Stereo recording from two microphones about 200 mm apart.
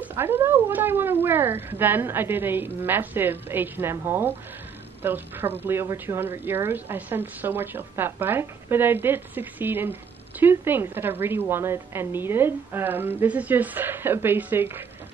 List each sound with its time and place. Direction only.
0.0 s a woman's voice: 10° right (ahead or behind)